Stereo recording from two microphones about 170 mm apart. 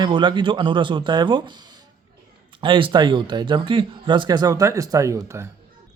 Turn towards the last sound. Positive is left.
turn(degrees=-15)  # may be behind; listen again after turning